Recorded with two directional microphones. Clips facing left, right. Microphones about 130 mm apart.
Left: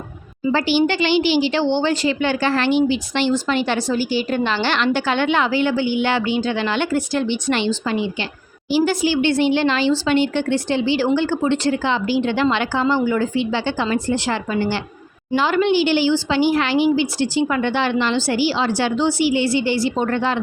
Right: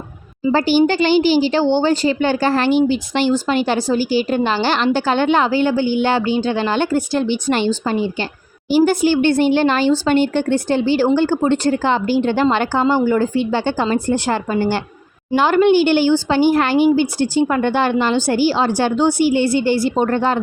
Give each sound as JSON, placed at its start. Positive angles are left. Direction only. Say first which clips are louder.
{"t": 0.5, "sound": "speech", "louder": "right 4 dB", "side_deg": -45}